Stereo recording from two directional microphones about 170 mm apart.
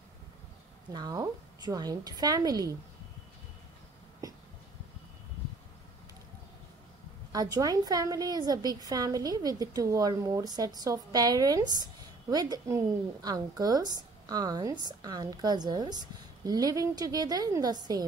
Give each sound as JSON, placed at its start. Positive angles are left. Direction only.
{"t": 0.9, "sound": "a woman's voice", "side_deg": -20}
{"t": 7.3, "sound": "a woman's voice", "side_deg": -20}